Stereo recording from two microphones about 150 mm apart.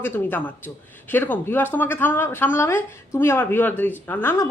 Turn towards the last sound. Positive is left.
turn(degrees=15)  # may be behind; listen again after turning